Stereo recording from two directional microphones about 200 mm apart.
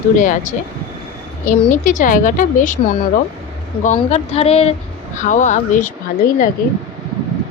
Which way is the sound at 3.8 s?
35° left (ahead or behind).